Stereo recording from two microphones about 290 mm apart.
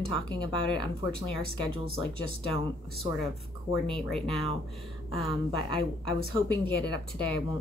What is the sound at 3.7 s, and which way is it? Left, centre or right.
Speech, centre.